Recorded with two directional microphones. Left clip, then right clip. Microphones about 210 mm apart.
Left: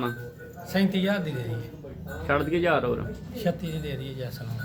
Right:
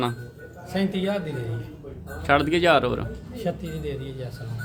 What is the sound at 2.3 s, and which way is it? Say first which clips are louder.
Speech: right 5 dB; 60° right (ahead or behind).